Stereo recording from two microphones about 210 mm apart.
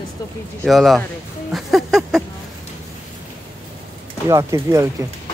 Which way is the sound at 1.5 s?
Centre (ahead or behind).